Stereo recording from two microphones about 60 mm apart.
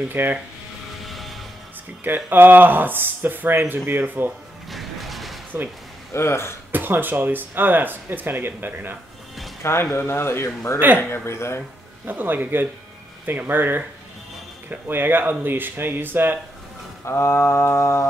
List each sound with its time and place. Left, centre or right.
0.1 s speech: right
1.0 s music: centre
2.0 s speech: right
4.6 s music: centre
6.1 s mantra: left
6.7 s speech: right
9.6 s speech: left
9.9 s mantra: left
12.1 s speech: right
17.0 s mantra: left